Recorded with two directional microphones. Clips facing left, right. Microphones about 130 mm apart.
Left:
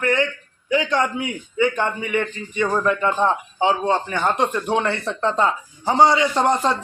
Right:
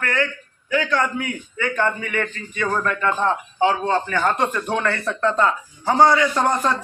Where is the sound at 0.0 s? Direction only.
20° left (ahead or behind).